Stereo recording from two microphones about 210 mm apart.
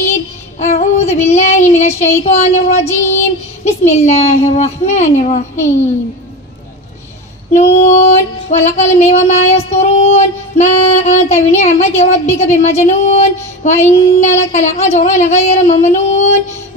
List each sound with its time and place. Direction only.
0.1 s child singing: 30° left (ahead or behind)
3.6 s female singing: 30° left (ahead or behind)
7.5 s female singing: 35° left (ahead or behind)
13.7 s child singing: 10° left (ahead or behind)
14.5 s female singing: 30° left (ahead or behind)